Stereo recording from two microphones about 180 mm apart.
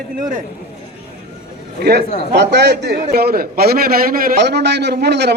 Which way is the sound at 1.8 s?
60° right (ahead or behind).